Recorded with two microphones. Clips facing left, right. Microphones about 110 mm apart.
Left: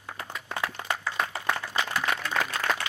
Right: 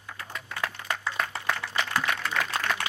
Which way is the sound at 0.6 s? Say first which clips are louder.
Left 1 dB; 25° left (ahead or behind).